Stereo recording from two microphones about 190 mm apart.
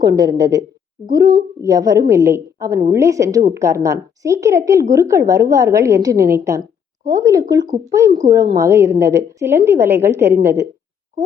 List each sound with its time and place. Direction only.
0.0 s a woman's voice: 20° right (ahead or behind)